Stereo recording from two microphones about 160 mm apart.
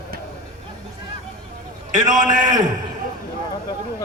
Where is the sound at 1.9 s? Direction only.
55° right (ahead or behind).